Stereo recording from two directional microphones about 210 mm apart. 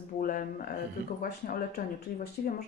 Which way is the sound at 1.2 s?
45° left (ahead or behind).